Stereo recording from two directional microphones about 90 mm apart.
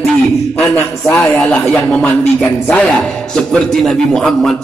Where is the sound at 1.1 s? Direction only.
5° left (ahead or behind).